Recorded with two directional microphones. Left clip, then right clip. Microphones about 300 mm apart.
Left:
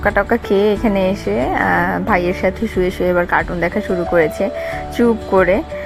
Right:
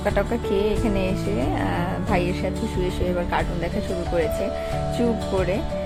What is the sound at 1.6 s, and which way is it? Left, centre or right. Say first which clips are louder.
Speech: left 11 dB; centre.